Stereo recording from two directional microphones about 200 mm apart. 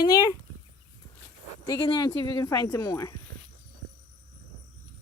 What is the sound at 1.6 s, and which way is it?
Speech, 20° left (ahead or behind).